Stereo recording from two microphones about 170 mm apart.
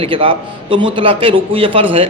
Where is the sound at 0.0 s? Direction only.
30° right (ahead or behind).